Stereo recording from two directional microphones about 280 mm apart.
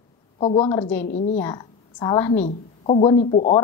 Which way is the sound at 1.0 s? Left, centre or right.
Left.